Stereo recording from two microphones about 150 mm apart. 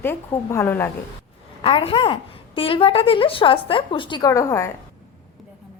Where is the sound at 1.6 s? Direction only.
40° left (ahead or behind); by 4.7 s 20° left (ahead or behind).